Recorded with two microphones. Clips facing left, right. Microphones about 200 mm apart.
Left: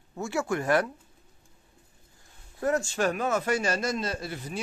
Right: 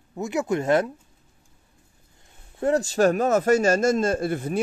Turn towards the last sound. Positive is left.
turn(degrees=-55)  # may be behind; listen again after turning